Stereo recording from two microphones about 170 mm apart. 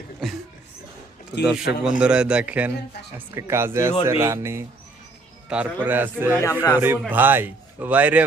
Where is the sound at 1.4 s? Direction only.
5° right (ahead or behind).